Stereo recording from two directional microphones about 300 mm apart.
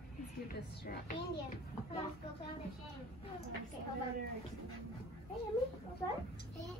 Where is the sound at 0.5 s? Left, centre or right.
Left.